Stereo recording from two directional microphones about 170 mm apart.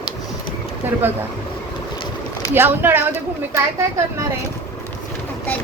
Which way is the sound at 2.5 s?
10° right (ahead or behind).